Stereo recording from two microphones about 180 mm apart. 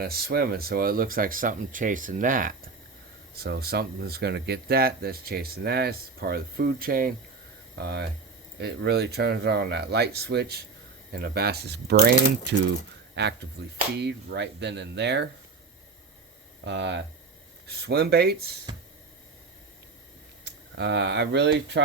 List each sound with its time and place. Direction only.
0.0 s speech: 55° right (ahead or behind)
3.3 s speech: 60° right (ahead or behind)
16.6 s speech: 75° right (ahead or behind)
17.7 s speech: 65° right (ahead or behind)
20.4 s speech: 75° right (ahead or behind)